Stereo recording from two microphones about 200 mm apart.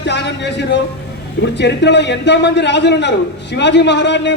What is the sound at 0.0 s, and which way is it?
A man's voice, 60° left (ahead or behind).